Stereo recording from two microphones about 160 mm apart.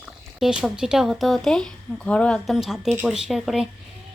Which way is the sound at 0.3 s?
Centre (ahead or behind).